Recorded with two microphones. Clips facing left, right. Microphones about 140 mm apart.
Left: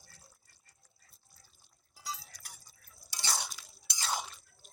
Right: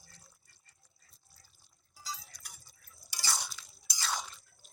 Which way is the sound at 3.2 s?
25° left (ahead or behind).